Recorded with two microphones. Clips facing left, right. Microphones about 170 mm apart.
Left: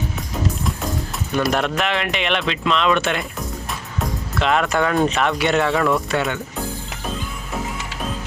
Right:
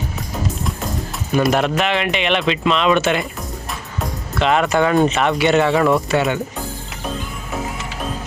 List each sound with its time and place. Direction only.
1.5 s speech: centre (ahead or behind)
4.4 s speech: centre (ahead or behind)